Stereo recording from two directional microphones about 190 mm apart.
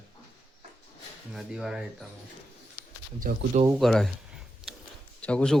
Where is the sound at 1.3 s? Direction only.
Centre (ahead or behind).